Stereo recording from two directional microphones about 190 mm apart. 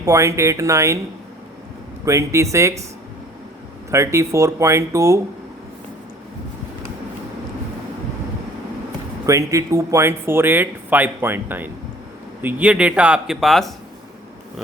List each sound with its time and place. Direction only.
0.0 s speech: 15° right (ahead or behind)
2.0 s speech: 15° right (ahead or behind)
3.9 s speech: 15° right (ahead or behind)
9.2 s speech: 15° right (ahead or behind); by 13.7 s centre (ahead or behind)